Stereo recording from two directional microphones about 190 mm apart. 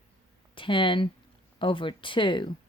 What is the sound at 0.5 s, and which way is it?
Speech, 25° left (ahead or behind).